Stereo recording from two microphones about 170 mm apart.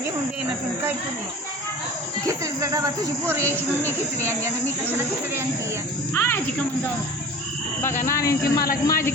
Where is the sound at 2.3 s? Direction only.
20° right (ahead or behind).